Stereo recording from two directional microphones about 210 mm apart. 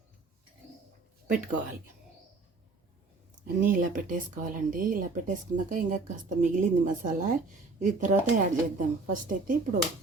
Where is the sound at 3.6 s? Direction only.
40° right (ahead or behind).